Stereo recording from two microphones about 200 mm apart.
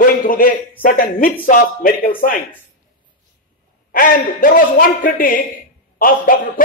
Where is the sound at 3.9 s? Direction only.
45° left (ahead or behind).